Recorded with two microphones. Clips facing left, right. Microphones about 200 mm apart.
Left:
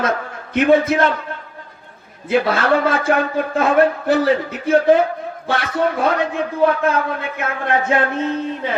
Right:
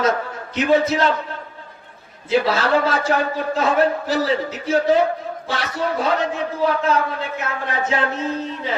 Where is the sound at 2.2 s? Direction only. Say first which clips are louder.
Left 2 dB; 55° left (ahead or behind).